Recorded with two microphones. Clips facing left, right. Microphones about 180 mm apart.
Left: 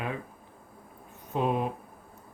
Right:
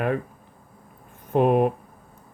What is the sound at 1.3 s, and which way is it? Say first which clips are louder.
Speech: right 9 dB; 60° right (ahead or behind).